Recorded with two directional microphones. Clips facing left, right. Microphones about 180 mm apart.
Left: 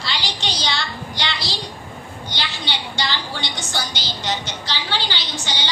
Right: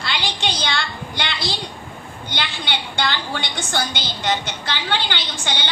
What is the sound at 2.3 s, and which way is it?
A woman's voice, 55° right (ahead or behind).